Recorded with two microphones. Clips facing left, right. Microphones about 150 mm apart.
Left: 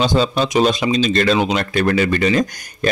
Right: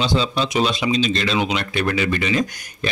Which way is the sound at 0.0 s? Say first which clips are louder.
Left 4 dB; 45° left (ahead or behind).